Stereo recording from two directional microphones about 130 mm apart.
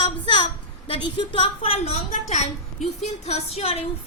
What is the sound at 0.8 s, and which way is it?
A woman's voice, 40° left (ahead or behind).